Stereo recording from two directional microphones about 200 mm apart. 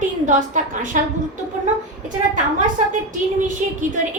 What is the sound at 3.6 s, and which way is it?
Speech, 40° right (ahead or behind).